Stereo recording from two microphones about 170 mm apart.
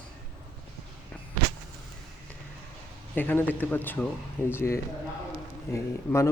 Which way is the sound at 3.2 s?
10° left (ahead or behind).